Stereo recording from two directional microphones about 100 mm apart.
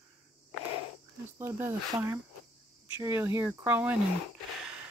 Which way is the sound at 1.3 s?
25° right (ahead or behind).